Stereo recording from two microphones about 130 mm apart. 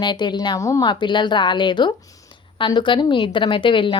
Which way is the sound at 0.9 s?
35° left (ahead or behind).